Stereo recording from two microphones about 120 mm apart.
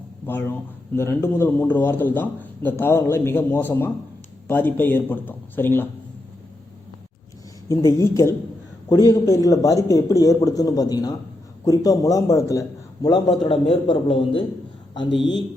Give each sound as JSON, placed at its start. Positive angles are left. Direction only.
{"t": 0.3, "sound": "a man's voice", "side_deg": 15}
{"t": 7.7, "sound": "speech", "side_deg": 25}
{"t": 13.3, "sound": "a man's voice", "side_deg": 50}